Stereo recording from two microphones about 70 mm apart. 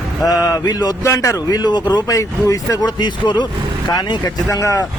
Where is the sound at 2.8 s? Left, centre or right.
Left.